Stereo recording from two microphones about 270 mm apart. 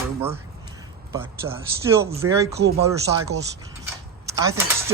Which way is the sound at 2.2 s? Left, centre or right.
Right.